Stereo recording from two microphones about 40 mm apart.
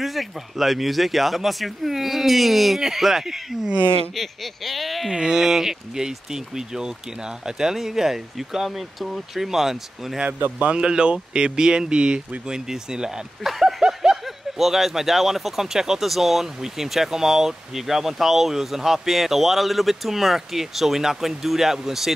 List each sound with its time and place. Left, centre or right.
0.0 s speech: centre
4.1 s speech: centre
5.1 s speech: centre
10.8 s speech: right
13.4 s a sound: centre
14.6 s speech: centre